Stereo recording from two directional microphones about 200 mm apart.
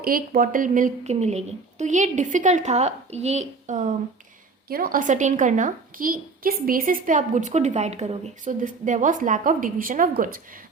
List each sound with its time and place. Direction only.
0.0 s a woman's voice: 45° right (ahead or behind)